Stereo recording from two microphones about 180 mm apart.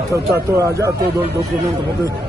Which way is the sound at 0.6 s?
15° right (ahead or behind).